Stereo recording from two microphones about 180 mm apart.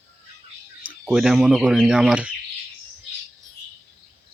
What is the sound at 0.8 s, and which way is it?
Speech, 5° right (ahead or behind).